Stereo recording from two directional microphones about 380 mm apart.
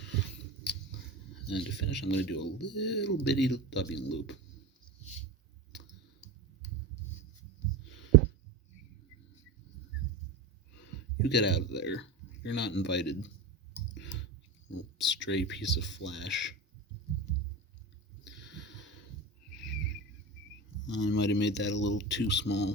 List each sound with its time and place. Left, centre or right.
0.6 s scissors: left
1.5 s speech: left
10.8 s speech: left
13.9 s clicking: left
14.9 s speech: left
18.3 s a sound: left
20.8 s speech: left